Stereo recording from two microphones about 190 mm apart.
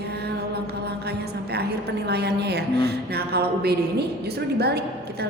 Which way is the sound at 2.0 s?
60° right (ahead or behind).